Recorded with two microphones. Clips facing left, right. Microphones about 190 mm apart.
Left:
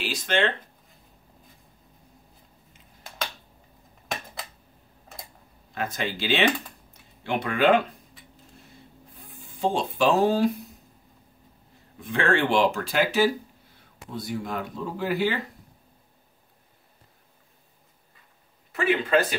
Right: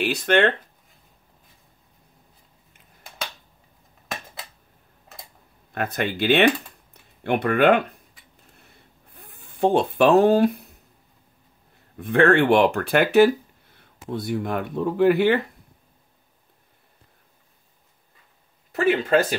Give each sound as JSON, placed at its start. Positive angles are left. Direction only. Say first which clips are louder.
{"t": 0.0, "sound": "speech", "louder": "right 6 dB", "side_deg": -60}
{"t": 5.8, "sound": "speech", "louder": "right 5 dB", "side_deg": -60}
{"t": 9.1, "sound": "a sound", "louder": "right 1 dB", "side_deg": -60}
{"t": 12.0, "sound": "speech", "louder": "right 7 dB", "side_deg": -60}
{"t": 18.7, "sound": "speech", "louder": "right 3 dB", "side_deg": -40}